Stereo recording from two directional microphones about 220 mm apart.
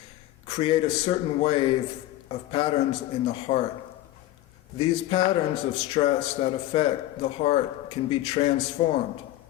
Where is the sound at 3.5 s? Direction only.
30° left (ahead or behind).